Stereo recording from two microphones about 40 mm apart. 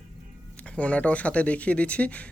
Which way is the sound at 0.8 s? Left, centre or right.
Left.